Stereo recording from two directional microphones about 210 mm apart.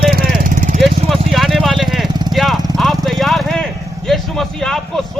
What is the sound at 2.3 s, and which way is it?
Vehicle, centre (ahead or behind).